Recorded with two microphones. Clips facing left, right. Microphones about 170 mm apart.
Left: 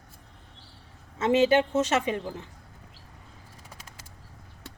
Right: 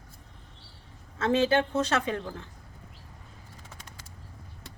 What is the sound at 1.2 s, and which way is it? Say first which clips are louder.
A woman's voice: left 3 dB; 15° left (ahead or behind).